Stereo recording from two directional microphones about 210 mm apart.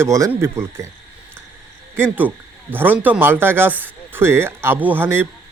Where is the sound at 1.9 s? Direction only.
10° right (ahead or behind).